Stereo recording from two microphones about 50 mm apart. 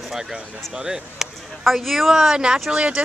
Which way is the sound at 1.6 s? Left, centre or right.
Centre.